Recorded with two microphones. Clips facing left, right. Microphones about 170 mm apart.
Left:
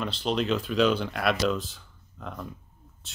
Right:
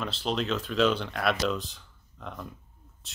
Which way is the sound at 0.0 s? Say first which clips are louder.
Left 2 dB; centre (ahead or behind).